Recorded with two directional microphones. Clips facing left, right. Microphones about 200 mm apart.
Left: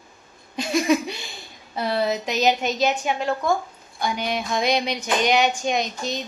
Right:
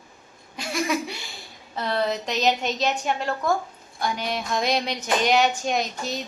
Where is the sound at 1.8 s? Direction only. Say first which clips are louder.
Left 2 dB; 10° left (ahead or behind).